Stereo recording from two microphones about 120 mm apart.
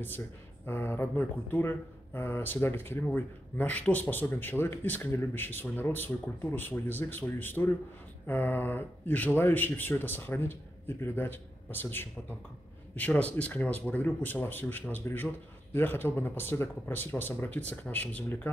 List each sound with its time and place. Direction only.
0.7 s speech: 20° left (ahead or behind)